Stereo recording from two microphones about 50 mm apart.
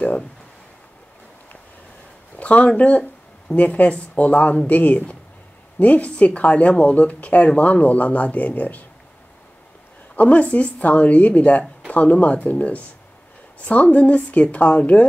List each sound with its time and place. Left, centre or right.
2.3 s a sound: left
3.0 s speech: left
10.1 s speech: left